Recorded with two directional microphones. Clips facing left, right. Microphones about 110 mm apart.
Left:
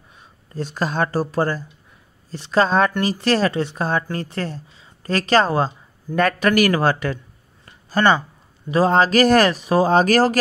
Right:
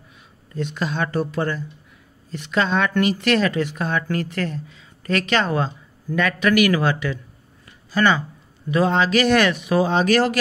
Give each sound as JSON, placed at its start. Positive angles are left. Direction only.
{"t": 0.2, "sound": "speech", "side_deg": 35}